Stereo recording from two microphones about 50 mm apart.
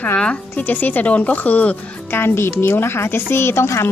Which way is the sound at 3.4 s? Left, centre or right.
Left.